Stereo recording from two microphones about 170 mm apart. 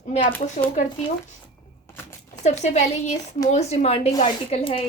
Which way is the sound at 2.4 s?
40° left (ahead or behind).